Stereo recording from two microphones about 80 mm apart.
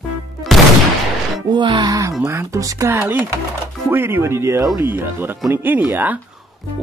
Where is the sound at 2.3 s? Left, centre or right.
Right.